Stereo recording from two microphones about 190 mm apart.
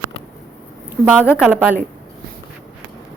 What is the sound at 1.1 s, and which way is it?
Speech, 10° right (ahead or behind).